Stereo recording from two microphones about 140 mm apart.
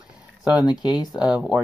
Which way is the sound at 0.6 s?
30° left (ahead or behind).